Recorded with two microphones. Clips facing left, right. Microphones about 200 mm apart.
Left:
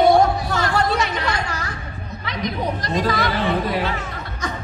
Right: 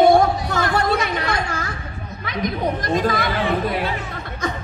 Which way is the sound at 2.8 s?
50° right (ahead or behind).